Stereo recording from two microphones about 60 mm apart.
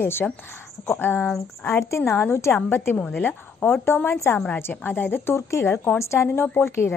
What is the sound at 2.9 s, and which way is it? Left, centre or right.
A woman's voice, left.